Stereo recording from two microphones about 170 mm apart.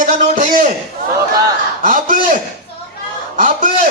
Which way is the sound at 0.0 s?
50° right (ahead or behind).